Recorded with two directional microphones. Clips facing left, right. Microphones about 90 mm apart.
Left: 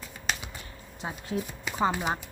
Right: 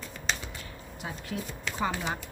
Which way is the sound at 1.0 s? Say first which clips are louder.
Left 2 dB; 25° left (ahead or behind).